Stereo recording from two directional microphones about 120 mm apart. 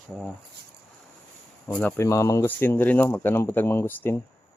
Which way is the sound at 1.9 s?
25° left (ahead or behind).